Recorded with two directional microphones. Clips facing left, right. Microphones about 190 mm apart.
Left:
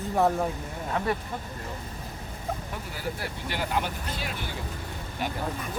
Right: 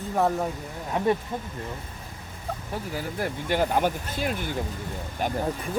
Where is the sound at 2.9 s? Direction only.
50° right (ahead or behind).